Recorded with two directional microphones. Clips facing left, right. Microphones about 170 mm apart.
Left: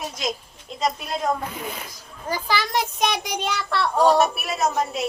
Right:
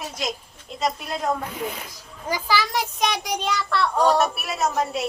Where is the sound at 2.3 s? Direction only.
5° right (ahead or behind).